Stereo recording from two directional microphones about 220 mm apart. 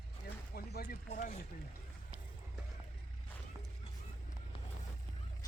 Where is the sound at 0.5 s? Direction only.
45° left (ahead or behind).